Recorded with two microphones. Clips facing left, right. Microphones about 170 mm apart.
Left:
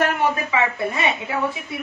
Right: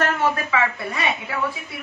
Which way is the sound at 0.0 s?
15° left (ahead or behind).